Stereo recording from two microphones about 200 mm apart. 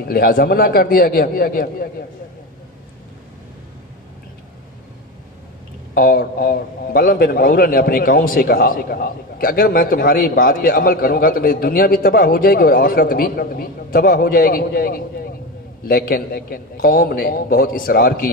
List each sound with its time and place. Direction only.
0.0 s a man's voice: 50° left (ahead or behind)
5.9 s a man's voice: 45° left (ahead or behind)